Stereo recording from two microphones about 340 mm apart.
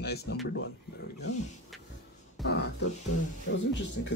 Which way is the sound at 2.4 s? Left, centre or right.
Centre.